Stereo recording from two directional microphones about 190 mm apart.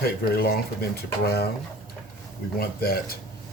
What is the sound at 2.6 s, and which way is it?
Speech, 55° left (ahead or behind).